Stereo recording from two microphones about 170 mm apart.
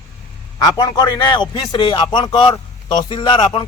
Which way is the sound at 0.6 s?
25° left (ahead or behind).